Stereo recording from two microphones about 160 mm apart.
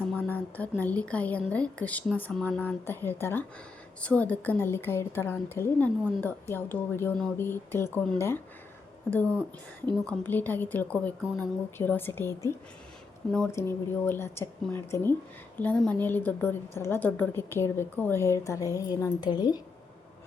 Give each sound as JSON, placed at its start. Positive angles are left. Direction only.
{"t": 0.2, "sound": "a sound", "side_deg": 10}
{"t": 0.8, "sound": "a woman's voice", "side_deg": 10}
{"t": 9.0, "sound": "a woman's voice", "side_deg": 10}
{"t": 13.5, "sound": "a woman's voice", "side_deg": 15}